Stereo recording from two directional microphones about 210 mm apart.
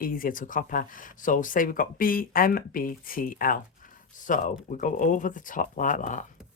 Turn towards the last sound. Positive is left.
turn(degrees=40)  # may be behind; listen again after turning